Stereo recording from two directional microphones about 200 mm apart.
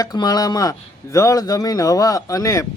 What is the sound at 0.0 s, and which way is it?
Speech, 20° left (ahead or behind).